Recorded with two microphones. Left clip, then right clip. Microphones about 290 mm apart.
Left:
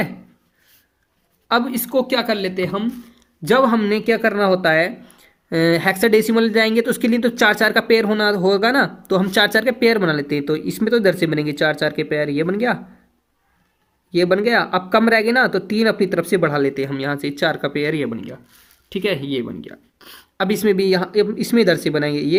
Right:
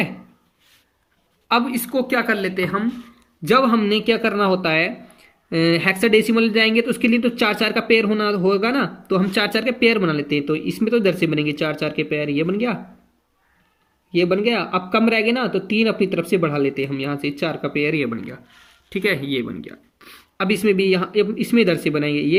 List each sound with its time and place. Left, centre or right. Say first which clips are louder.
1.5 s a woman's voice: even; left
14.1 s a woman's voice: left 2 dB; left
19.7 s a sound: left 2 dB; left
20.7 s speech: left 1 dB; left